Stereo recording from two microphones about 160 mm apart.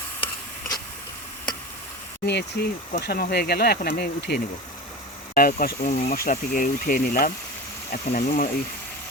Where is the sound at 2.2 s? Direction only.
90° left.